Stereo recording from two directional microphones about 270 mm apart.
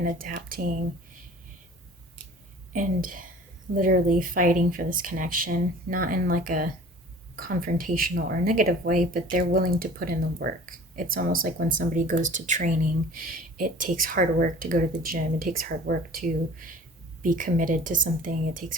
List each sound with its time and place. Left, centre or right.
0.0 s speech: right
2.7 s speech: right